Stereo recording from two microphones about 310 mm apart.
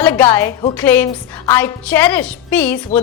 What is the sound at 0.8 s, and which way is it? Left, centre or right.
A woman's voice, centre.